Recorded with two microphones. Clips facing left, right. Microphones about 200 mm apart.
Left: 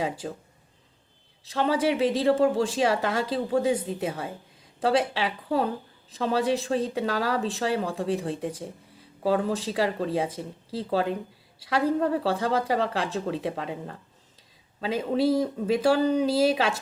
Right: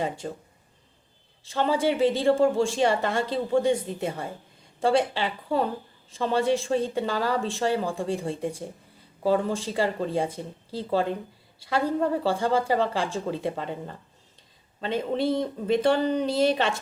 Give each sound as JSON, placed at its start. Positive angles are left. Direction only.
{"t": 0.0, "sound": "a woman's voice", "side_deg": 5}
{"t": 1.5, "sound": "a woman's voice", "side_deg": 0}